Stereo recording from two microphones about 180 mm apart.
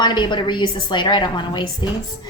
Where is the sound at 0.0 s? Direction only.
25° left (ahead or behind).